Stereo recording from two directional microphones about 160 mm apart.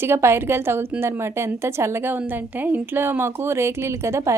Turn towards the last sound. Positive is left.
turn(degrees=-15)  # may be behind; listen again after turning